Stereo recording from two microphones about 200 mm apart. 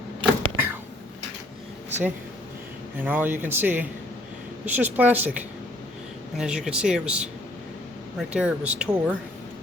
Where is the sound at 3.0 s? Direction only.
10° right (ahead or behind).